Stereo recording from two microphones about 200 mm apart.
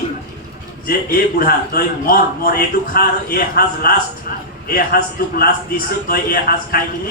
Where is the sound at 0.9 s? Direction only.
50° left (ahead or behind).